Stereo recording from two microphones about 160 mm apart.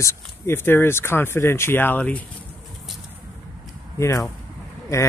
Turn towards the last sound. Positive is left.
turn(degrees=20)  # may be behind; listen again after turning